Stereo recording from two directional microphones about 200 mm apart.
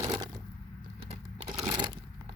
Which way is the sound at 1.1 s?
30° right (ahead or behind).